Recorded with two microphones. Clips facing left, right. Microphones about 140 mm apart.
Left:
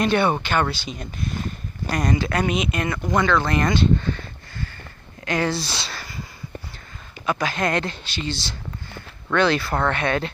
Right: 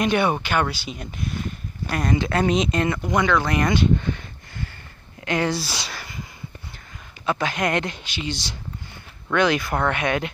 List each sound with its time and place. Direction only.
0.0 s speech: 10° right (ahead or behind)
2.1 s speech: 25° right (ahead or behind)
3.2 s speech: 10° right (ahead or behind)
5.6 s a sound: 10° right (ahead or behind)
7.2 s speech: 25° right (ahead or behind)